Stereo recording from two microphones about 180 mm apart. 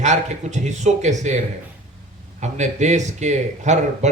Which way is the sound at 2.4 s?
40° right (ahead or behind).